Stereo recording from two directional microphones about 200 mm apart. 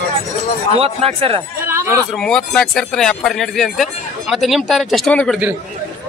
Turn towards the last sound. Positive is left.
turn(degrees=5)  # may be behind; listen again after turning